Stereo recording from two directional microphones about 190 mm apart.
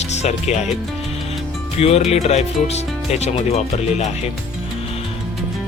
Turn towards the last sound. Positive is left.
turn(degrees=35)  # may be behind; listen again after turning